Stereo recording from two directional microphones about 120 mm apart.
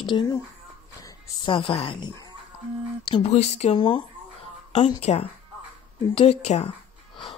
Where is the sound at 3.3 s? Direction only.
65° left (ahead or behind).